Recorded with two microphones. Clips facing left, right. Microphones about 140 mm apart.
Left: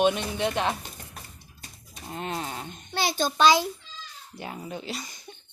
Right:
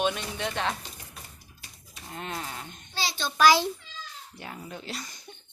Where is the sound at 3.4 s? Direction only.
20° left (ahead or behind).